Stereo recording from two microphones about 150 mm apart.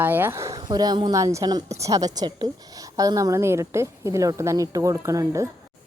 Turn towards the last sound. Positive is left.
turn(degrees=-20)  # may be behind; listen again after turning